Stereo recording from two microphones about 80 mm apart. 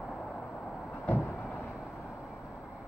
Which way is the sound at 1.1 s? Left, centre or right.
Centre.